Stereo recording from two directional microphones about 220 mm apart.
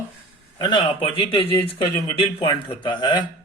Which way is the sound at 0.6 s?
20° left (ahead or behind).